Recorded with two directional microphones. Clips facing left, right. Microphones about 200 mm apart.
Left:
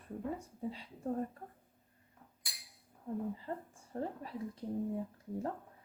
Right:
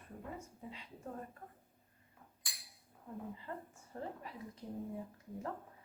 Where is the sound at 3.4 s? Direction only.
35° left (ahead or behind).